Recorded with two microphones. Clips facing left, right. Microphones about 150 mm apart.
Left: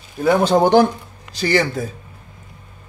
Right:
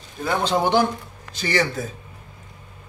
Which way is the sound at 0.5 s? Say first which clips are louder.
Left 4 dB; 45° left (ahead or behind).